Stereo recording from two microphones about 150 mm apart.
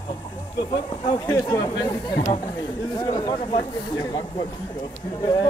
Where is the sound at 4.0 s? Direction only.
25° left (ahead or behind).